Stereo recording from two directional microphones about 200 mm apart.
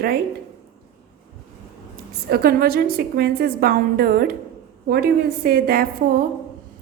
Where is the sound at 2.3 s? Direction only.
50° right (ahead or behind).